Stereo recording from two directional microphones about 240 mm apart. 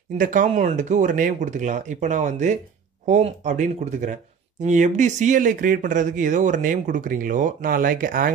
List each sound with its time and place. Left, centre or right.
0.2 s speech: right